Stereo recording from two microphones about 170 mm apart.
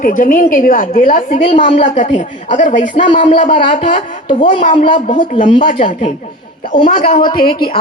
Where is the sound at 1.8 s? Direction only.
50° left (ahead or behind).